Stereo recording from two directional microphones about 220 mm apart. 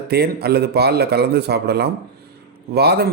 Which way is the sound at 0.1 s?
45° right (ahead or behind).